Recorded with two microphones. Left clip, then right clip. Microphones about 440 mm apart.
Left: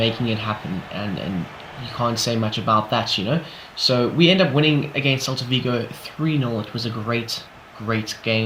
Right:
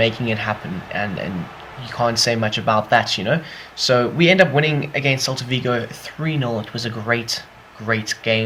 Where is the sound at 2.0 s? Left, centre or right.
Centre.